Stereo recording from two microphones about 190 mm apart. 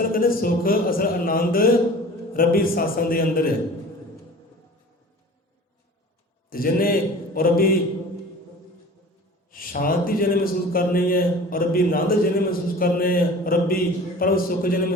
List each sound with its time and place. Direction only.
0.1 s a man's voice: 50° left (ahead or behind)
6.5 s a man's voice: 50° left (ahead or behind)
9.5 s a man's voice: 50° left (ahead or behind)